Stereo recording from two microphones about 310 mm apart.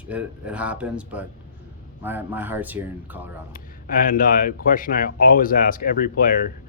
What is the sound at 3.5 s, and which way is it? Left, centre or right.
Speech, left.